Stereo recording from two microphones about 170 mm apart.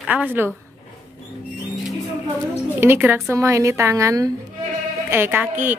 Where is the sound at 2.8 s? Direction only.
10° right (ahead or behind).